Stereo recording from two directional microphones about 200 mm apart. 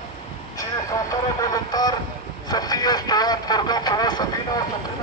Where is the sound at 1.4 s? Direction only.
20° left (ahead or behind).